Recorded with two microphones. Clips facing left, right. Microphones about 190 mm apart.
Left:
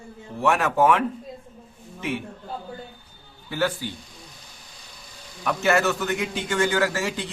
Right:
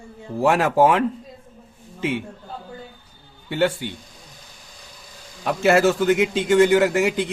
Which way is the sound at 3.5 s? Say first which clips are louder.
Right 4 dB; 25° right (ahead or behind).